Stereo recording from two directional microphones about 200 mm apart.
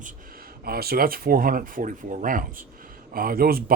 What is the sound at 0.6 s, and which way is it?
Speech, 50° right (ahead or behind).